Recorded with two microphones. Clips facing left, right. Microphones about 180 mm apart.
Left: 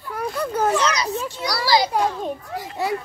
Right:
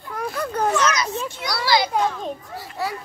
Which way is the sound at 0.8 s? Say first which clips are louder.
Even; 30° left (ahead or behind).